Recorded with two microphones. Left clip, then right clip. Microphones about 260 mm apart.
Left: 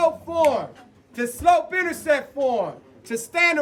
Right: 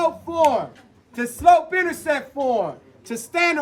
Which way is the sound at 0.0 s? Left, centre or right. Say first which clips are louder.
Even; centre.